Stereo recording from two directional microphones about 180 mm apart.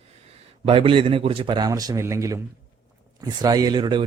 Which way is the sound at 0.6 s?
30° right (ahead or behind).